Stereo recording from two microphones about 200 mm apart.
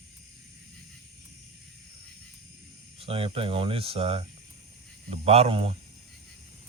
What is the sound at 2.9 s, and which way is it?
Speech, 30° right (ahead or behind).